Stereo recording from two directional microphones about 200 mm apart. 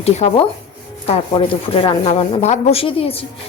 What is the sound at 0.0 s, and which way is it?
Speech, 30° left (ahead or behind).